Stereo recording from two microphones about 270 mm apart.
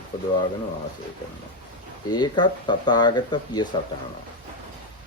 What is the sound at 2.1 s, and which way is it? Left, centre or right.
Speech, centre.